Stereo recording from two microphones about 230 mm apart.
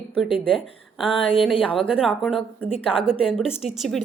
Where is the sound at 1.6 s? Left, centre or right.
Centre.